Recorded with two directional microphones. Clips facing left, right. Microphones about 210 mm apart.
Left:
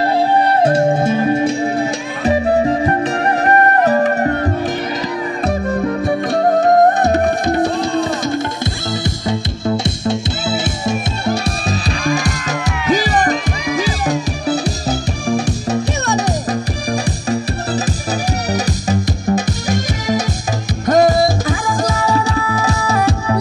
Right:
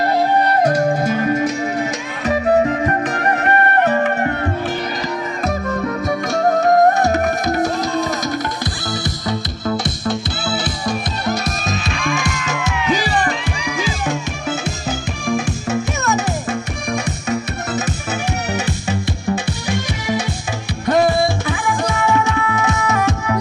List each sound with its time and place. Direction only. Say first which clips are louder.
0.0 s music: left 2 dB; 30° left (ahead or behind)